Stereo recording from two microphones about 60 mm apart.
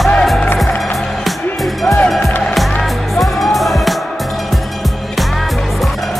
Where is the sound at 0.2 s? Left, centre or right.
Centre.